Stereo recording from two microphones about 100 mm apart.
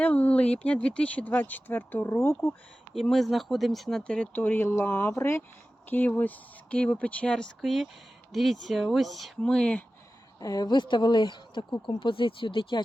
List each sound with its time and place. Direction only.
0.0 s speech: 15° left (ahead or behind)
2.9 s speech: centre (ahead or behind)
7.6 s speech: centre (ahead or behind)
10.4 s speech: 40° left (ahead or behind); by 12.8 s 60° left (ahead or behind)